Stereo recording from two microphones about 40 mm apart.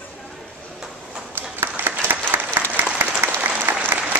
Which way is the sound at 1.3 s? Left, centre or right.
Right.